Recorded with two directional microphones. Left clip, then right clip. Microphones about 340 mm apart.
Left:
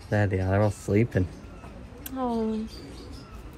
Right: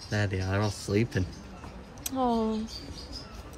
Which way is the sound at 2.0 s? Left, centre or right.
Right.